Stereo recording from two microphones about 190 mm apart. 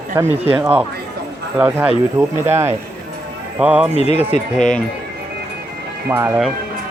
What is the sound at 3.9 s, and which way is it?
Speech, 35° left (ahead or behind).